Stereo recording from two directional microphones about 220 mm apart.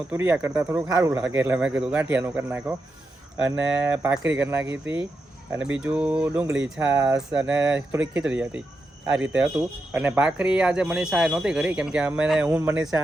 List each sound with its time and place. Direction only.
0.1 s speech: 10° right (ahead or behind)
3.9 s speech: 10° right (ahead or behind)
4.6 s speech: 55° right (ahead or behind)
5.8 s speech: 5° right (ahead or behind)